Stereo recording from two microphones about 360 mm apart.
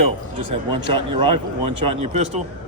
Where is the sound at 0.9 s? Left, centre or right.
Centre.